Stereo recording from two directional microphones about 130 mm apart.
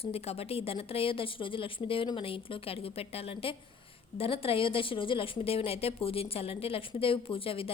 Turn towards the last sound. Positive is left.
turn(degrees=45)  # may be behind; listen again after turning